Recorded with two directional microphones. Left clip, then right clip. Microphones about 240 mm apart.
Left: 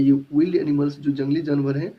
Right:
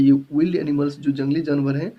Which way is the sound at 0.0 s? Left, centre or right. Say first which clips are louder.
Right 1 dB; right.